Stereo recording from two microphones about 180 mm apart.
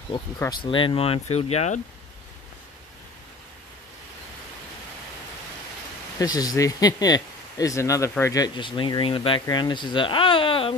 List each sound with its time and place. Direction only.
0.4 s speech: 25° left (ahead or behind)
6.1 s speech: 20° left (ahead or behind)